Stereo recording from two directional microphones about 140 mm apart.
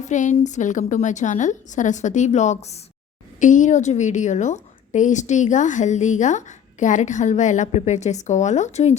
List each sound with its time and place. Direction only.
0.0 s a woman's voice: 60° left (ahead or behind)